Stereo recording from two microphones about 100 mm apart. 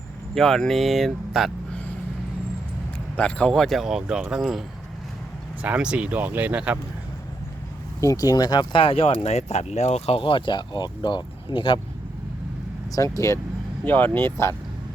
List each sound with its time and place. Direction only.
0.3 s speech: 5° left (ahead or behind)
3.2 s speech: 10° left (ahead or behind)
5.6 s speech: 15° right (ahead or behind)
8.0 s speech: 35° left (ahead or behind)
8.8 s speech: 65° left (ahead or behind)
12.9 s speech: 35° left (ahead or behind)
13.8 s speech: 20° left (ahead or behind)